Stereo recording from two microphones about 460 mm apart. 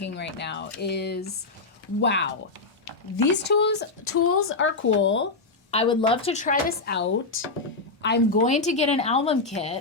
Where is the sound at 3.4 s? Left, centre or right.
Left.